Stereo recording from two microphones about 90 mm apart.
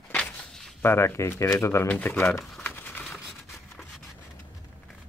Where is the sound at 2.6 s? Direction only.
25° left (ahead or behind).